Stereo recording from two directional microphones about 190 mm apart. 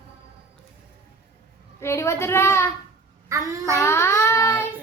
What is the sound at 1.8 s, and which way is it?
Speech, 15° left (ahead or behind).